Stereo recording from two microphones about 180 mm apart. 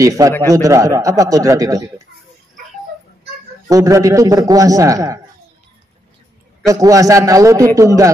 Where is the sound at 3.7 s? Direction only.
15° right (ahead or behind).